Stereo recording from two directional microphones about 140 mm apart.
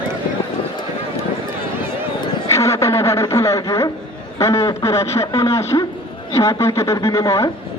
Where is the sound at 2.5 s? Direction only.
20° left (ahead or behind).